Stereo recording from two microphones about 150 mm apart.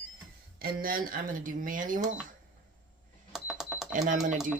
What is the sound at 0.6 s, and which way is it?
Speech, 70° right (ahead or behind).